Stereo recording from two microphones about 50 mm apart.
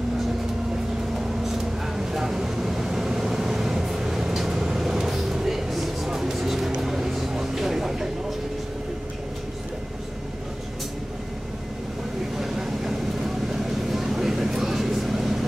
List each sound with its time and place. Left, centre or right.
1.1 s vehicle: centre
12.4 s vehicle: centre